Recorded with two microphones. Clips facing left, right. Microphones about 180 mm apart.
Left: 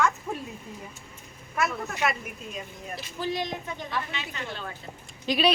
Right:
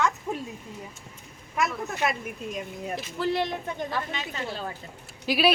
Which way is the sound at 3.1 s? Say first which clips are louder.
Right 3 dB; 65° right (ahead or behind).